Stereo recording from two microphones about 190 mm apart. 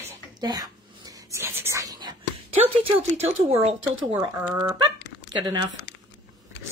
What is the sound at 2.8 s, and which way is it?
Speech, 35° right (ahead or behind).